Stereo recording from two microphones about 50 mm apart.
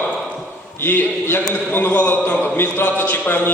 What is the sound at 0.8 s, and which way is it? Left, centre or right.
A man's voice, left.